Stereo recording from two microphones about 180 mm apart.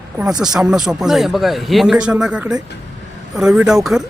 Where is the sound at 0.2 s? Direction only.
5° right (ahead or behind).